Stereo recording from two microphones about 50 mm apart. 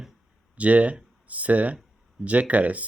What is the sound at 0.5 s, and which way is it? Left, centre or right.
Speech, right.